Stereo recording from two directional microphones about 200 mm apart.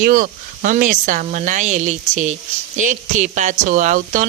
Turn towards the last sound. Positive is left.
turn(degrees=-40)  # may be behind; listen again after turning